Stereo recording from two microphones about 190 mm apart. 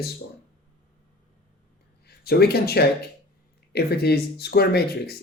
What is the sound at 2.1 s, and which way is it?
Speech, 55° left (ahead or behind).